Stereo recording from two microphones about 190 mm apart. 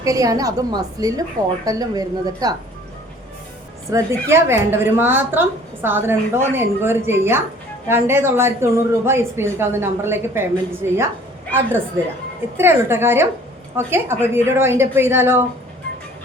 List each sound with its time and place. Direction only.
0.0 s a woman's voice: 20° right (ahead or behind)
3.9 s a woman's voice: 15° right (ahead or behind)
12.5 s a woman's voice: 10° right (ahead or behind)